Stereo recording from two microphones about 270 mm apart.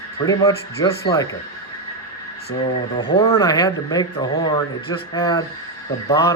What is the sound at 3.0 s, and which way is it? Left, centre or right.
Speech, centre.